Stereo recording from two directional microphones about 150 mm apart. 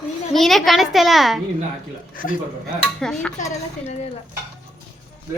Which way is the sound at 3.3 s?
55° left (ahead or behind).